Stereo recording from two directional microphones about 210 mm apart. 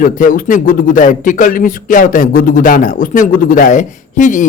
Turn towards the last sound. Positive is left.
turn(degrees=35)  # may be behind; listen again after turning